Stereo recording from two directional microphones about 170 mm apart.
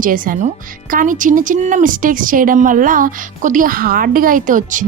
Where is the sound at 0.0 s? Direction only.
55° right (ahead or behind).